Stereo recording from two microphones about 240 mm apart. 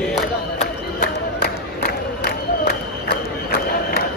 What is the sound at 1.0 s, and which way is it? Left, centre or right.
Crowd, left.